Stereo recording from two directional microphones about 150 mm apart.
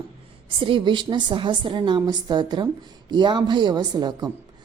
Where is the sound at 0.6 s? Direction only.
35° right (ahead or behind).